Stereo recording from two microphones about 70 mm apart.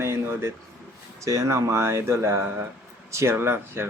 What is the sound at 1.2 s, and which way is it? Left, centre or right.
Speech, right.